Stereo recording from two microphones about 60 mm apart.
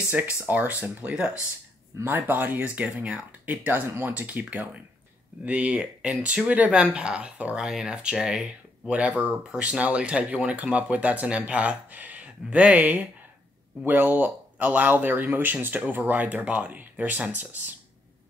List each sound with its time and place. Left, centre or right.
0.5 s a man's voice: right